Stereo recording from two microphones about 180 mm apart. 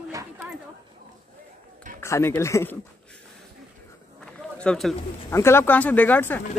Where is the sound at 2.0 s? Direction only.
15° left (ahead or behind).